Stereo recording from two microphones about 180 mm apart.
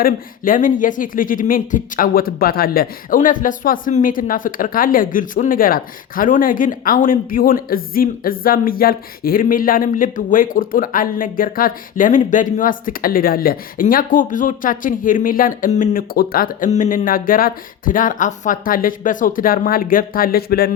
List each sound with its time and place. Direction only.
0.0 s speech: 50° left (ahead or behind)